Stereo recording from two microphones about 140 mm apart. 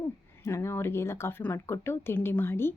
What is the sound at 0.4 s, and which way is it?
A woman's voice, 20° left (ahead or behind).